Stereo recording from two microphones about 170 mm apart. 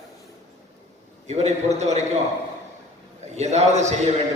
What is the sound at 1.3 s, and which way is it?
Speech, 40° right (ahead or behind).